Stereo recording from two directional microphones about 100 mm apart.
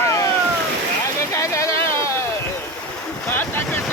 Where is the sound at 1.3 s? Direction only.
30° left (ahead or behind).